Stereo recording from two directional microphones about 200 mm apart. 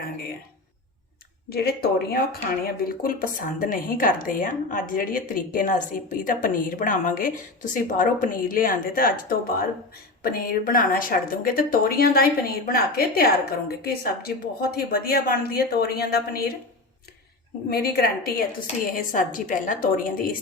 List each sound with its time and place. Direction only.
1.5 s a woman's voice: 50° left (ahead or behind)
17.7 s a woman's voice: 50° left (ahead or behind)